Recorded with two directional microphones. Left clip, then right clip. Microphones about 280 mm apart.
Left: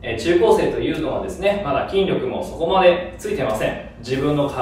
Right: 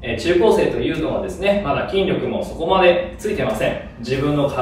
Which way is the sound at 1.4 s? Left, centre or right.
Centre.